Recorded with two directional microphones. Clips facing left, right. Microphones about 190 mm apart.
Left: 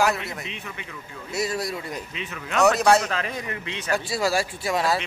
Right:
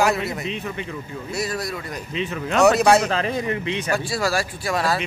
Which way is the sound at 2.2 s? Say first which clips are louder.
Right 4 dB; 30° right (ahead or behind).